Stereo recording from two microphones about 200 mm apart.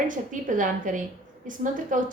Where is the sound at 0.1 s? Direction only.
40° right (ahead or behind).